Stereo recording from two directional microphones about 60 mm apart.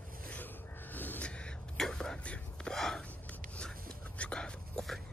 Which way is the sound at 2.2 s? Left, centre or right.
Centre.